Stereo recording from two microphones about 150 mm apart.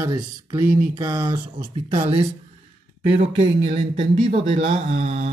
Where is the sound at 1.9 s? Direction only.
40° right (ahead or behind).